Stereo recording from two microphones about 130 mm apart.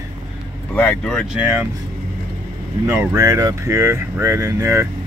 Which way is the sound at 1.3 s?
10° right (ahead or behind).